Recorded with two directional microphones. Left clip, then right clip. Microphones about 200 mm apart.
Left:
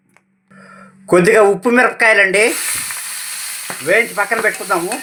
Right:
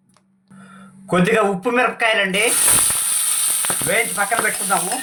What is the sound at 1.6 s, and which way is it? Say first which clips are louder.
Speech: left 6 dB; 35° left (ahead or behind).